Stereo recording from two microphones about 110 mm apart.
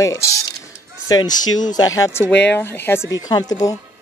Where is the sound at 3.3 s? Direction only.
35° left (ahead or behind).